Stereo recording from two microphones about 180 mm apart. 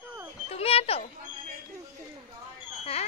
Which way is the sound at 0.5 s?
30° left (ahead or behind).